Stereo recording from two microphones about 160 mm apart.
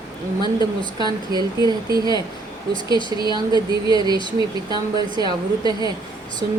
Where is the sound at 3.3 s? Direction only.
25° right (ahead or behind).